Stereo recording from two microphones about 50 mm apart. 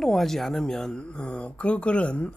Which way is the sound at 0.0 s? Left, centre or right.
Centre.